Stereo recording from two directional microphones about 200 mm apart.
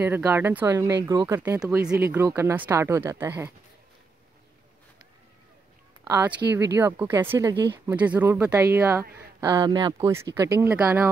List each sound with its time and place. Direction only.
0.0 s speech: 10° right (ahead or behind)
6.0 s speech: 10° right (ahead or behind)